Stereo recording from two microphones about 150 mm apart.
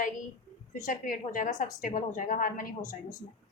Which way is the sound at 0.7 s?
65° left (ahead or behind).